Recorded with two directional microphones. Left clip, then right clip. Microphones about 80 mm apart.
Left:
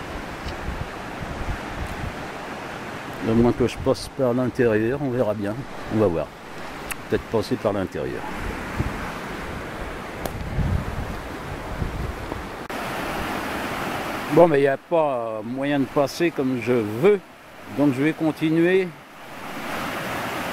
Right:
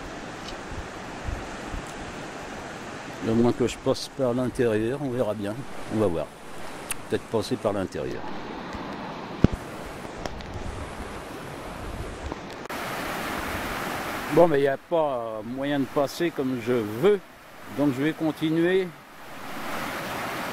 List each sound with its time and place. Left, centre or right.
3.3 s speech: centre
13.1 s a sound: right
14.4 s speech: centre